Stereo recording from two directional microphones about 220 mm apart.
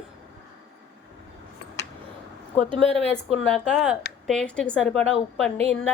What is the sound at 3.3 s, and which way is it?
A woman's voice, 5° left (ahead or behind).